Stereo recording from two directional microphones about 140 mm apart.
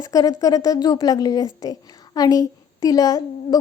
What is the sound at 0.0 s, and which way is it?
A woman's voice, 25° left (ahead or behind).